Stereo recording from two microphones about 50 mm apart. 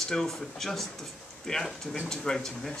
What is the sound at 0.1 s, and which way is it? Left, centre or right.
Speech, centre.